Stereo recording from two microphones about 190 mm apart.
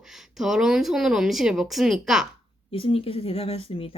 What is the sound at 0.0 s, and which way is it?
Speech, centre (ahead or behind).